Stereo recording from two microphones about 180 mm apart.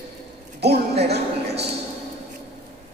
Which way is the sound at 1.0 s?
65° right (ahead or behind).